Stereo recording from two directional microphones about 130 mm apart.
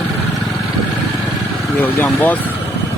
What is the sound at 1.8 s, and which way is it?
Speech, 15° left (ahead or behind).